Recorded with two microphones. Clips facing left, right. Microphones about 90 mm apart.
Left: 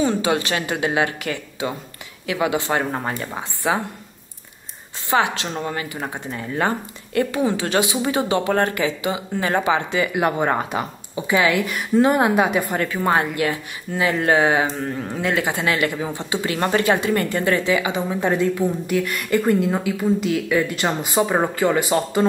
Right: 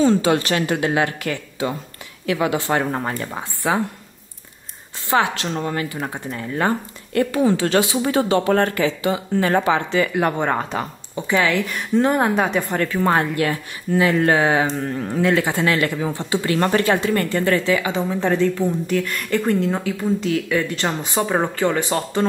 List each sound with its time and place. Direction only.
0.0 s speech: 20° left (ahead or behind)
5.1 s speech: 20° left (ahead or behind)
7.2 s a woman's voice: 20° left (ahead or behind)